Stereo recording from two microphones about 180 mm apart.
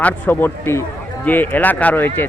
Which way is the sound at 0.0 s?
10° left (ahead or behind).